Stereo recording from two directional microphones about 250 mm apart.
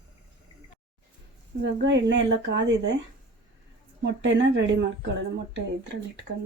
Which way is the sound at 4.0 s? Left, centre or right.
Right.